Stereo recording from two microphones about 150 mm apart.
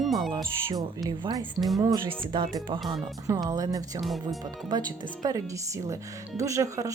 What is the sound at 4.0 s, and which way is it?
Speech, centre (ahead or behind).